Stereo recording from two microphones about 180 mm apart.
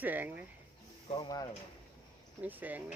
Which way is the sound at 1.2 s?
20° left (ahead or behind).